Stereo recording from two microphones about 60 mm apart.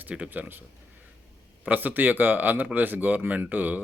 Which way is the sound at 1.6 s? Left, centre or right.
Right.